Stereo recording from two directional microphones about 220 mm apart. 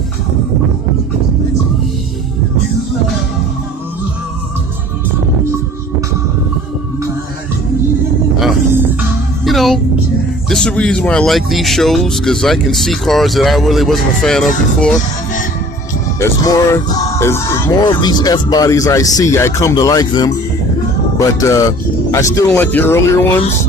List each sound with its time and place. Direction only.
8.4 s music: 5° right (ahead or behind)
10.5 s speech: 5° left (ahead or behind)
16.2 s speech: 15° left (ahead or behind)